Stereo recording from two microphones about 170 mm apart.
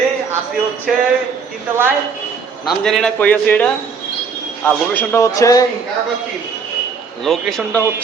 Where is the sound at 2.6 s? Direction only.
Centre (ahead or behind); by 5.6 s 20° left (ahead or behind).